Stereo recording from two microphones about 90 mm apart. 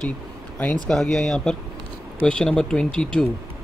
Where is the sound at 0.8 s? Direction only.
5° left (ahead or behind).